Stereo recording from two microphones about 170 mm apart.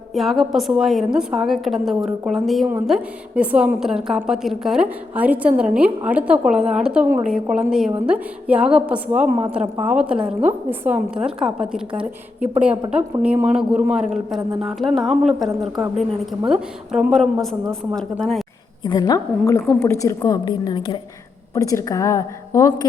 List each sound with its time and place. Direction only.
0.1 s a woman's voice: centre (ahead or behind)
16.5 s a woman's voice: 5° right (ahead or behind)
18.8 s a woman's voice: 25° left (ahead or behind)
21.5 s a woman's voice: 20° left (ahead or behind)